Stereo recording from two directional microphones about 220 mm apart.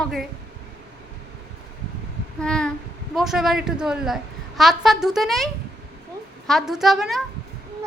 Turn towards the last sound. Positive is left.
turn(degrees=0)  # may be behind; listen again after turning